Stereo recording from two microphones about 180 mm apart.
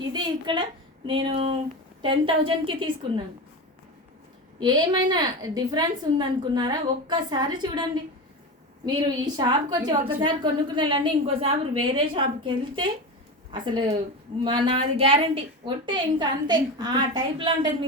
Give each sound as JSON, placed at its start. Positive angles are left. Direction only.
{"t": 0.1, "sound": "a woman's voice", "side_deg": -25}
{"t": 4.6, "sound": "a woman's voice", "side_deg": -25}
{"t": 9.2, "sound": "a woman's voice", "side_deg": -25}